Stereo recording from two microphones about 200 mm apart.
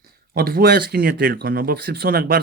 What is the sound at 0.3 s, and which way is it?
Speech, 50° right (ahead or behind).